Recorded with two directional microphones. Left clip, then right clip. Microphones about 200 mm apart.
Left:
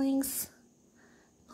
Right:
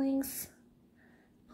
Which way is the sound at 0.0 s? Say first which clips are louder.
Left 2 dB; 10° left (ahead or behind).